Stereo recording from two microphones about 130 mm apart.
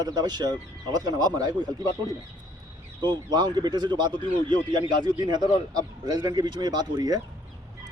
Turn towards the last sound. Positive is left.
turn(degrees=-30)  # may be behind; listen again after turning